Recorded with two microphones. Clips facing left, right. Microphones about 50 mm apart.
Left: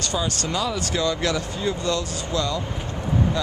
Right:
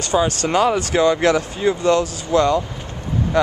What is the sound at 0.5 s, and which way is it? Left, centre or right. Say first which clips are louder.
Speech: right 8 dB; right.